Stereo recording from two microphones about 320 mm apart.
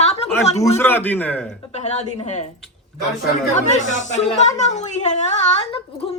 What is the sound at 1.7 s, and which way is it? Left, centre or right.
Speech, centre.